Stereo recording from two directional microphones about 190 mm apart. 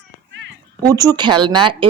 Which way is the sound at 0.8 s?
20° right (ahead or behind).